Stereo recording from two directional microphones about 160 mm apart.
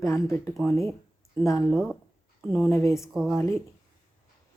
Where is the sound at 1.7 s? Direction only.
Centre (ahead or behind).